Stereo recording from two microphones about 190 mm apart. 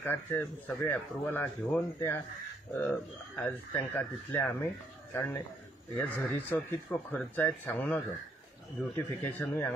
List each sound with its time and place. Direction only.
0.0 s speech: 10° left (ahead or behind)